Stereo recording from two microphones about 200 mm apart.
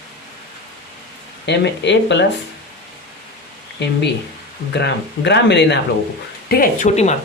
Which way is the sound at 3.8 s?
60° left (ahead or behind).